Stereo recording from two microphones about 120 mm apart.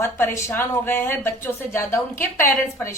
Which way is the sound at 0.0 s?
20° left (ahead or behind).